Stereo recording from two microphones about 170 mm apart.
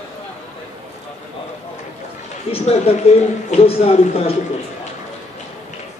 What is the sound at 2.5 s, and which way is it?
A man's voice, 35° left (ahead or behind).